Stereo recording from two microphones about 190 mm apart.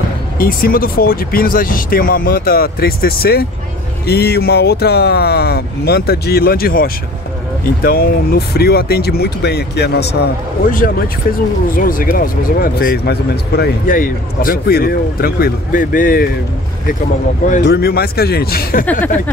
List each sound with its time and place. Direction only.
0.4 s speech: 50° left (ahead or behind)
11.3 s speech: 50° left (ahead or behind)
17.6 s speech: 55° left (ahead or behind)
18.9 s speech: 10° left (ahead or behind)